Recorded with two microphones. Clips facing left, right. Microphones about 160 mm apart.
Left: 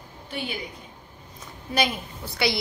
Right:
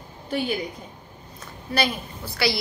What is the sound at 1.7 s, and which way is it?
Speech, 20° left (ahead or behind).